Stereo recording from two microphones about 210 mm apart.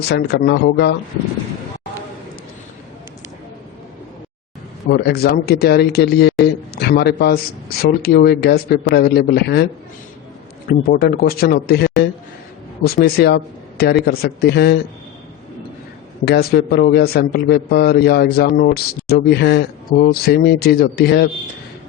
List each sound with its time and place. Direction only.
0.1 s a man's voice: 50° left (ahead or behind)
4.9 s a man's voice: 50° left (ahead or behind)
6.4 s a sound: 50° left (ahead or behind)
7.8 s a man's voice: 45° left (ahead or behind)
10.7 s a man's voice: 45° left (ahead or behind)
16.2 s a man's voice: 50° left (ahead or behind)